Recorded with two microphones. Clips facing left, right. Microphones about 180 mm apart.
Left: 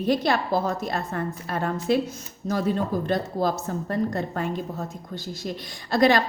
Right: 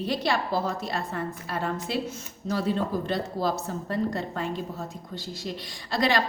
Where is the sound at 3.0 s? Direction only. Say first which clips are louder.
Left 3 dB; 45° left (ahead or behind).